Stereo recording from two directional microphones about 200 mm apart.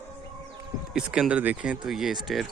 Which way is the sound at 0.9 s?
5° right (ahead or behind).